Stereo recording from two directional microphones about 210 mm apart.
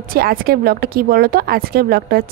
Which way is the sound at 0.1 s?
45° right (ahead or behind).